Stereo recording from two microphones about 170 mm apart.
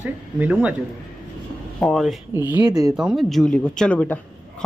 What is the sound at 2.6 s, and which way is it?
Speech, 25° right (ahead or behind).